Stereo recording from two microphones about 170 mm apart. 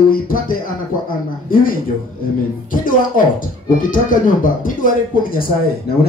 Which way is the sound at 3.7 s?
55° left (ahead or behind).